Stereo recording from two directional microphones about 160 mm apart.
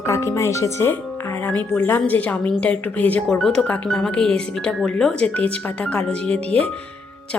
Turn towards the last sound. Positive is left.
turn(degrees=5)  # may be behind; listen again after turning